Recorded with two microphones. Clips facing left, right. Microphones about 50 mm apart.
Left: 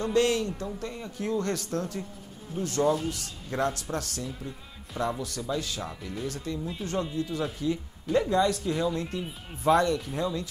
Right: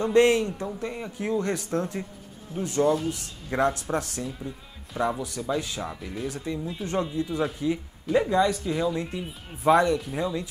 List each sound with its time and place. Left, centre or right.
0.0 s speech: right
2.8 s speech: centre
3.1 s speech: right
6.6 s speech: centre
7.2 s speech: right